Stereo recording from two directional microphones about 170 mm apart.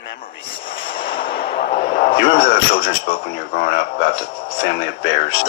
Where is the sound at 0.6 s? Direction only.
30° left (ahead or behind).